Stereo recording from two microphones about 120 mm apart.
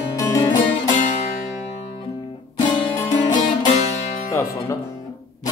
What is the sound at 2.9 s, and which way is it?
Music, 30° left (ahead or behind).